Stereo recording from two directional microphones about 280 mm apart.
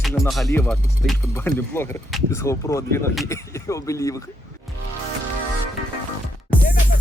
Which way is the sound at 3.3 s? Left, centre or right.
Centre.